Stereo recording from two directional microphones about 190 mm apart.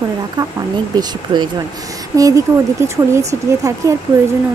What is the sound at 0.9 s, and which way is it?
Speech, 20° right (ahead or behind).